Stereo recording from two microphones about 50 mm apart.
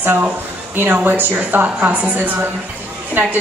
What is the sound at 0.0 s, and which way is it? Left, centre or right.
A woman's voice, right.